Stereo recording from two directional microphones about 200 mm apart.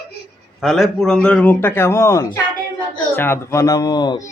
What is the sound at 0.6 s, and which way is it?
A man's voice, centre (ahead or behind).